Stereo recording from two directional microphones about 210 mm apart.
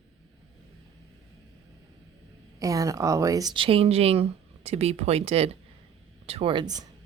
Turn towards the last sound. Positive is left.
turn(degrees=-20)  # may be behind; listen again after turning